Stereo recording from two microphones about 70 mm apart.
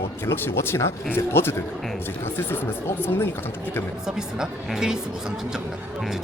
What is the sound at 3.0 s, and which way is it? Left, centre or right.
Speech, left.